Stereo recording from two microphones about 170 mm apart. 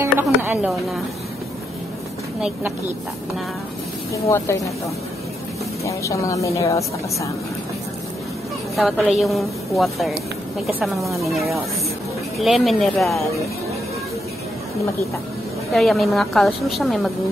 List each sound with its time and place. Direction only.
0.0 s music: 10° right (ahead or behind)
4.1 s speech: 15° left (ahead or behind)
5.9 s speech: 20° left (ahead or behind)
8.7 s a woman's voice: centre (ahead or behind)
12.4 s a woman's voice: centre (ahead or behind)
15.7 s a woman's voice: centre (ahead or behind)